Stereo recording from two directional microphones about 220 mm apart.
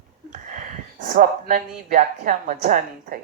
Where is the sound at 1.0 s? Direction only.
35° right (ahead or behind).